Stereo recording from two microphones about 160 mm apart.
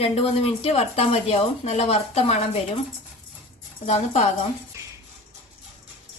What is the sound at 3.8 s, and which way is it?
Speech, 40° left (ahead or behind).